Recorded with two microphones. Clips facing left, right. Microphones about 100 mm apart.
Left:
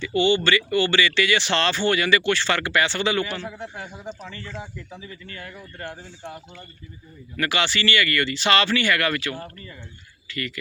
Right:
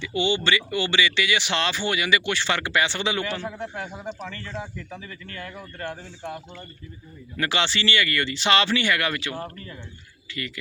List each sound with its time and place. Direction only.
0.0 s speech: 20° right (ahead or behind)
3.8 s speech: 50° right (ahead or behind)
4.9 s speech: 60° right (ahead or behind)
7.3 s speech: 25° right (ahead or behind)